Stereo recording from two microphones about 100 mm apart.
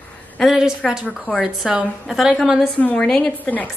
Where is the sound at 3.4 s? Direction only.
15° left (ahead or behind).